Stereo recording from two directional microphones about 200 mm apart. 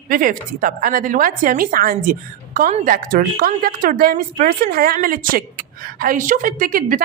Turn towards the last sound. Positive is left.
turn(degrees=-45)  # may be behind; listen again after turning